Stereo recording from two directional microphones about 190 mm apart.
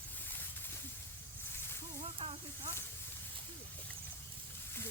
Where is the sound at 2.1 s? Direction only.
30° right (ahead or behind).